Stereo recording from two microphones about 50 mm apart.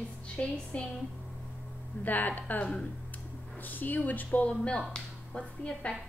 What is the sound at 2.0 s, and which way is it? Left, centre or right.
A woman's voice, left.